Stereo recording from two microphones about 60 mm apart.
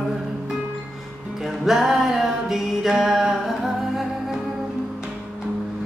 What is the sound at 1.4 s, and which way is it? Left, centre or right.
Music, centre.